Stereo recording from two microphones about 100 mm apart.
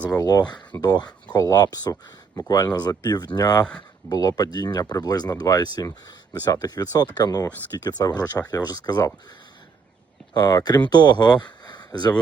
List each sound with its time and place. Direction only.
0.1 s speech: 40° left (ahead or behind)
10.3 s speech: 45° left (ahead or behind)
11.6 s a sound: 45° left (ahead or behind)